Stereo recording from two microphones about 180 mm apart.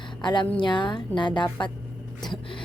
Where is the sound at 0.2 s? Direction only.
25° left (ahead or behind).